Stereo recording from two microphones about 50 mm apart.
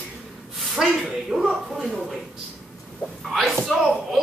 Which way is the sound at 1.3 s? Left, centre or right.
Right.